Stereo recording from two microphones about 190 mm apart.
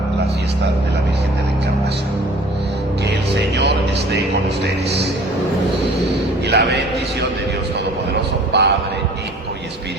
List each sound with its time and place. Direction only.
3.3 s music: 60° right (ahead or behind)
6.0 s a man's voice: 65° right (ahead or behind)
8.5 s a man's voice: 65° right (ahead or behind)